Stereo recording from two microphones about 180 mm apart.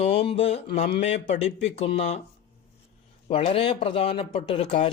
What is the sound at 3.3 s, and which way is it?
Speech, 30° left (ahead or behind).